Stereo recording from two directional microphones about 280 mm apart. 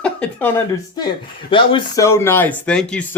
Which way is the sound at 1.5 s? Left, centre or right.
Centre.